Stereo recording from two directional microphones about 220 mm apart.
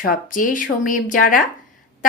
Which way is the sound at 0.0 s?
40° left (ahead or behind).